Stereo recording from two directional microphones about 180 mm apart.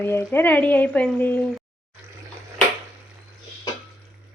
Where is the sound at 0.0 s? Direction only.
10° left (ahead or behind).